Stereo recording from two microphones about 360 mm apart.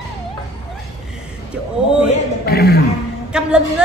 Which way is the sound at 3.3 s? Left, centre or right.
Centre.